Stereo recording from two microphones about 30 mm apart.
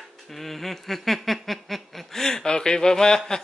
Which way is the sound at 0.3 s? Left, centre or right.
Centre.